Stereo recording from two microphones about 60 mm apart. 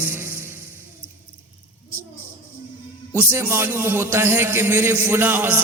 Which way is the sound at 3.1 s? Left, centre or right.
Right.